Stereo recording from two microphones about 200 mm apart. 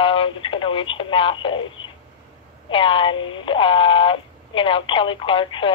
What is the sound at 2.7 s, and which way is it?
Speech, 25° left (ahead or behind).